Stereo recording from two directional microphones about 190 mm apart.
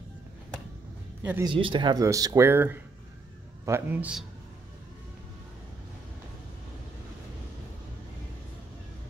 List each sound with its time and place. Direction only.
1.4 s a man's voice: 25° right (ahead or behind); by 4.3 s 5° right (ahead or behind)